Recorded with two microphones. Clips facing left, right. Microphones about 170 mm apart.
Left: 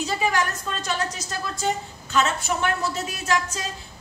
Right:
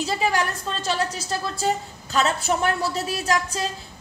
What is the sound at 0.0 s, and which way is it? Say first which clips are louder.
A woman's voice: right 1 dB; 30° right (ahead or behind).